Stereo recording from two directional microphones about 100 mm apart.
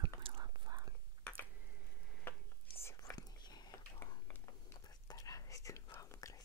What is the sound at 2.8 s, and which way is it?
Whispering, 30° left (ahead or behind).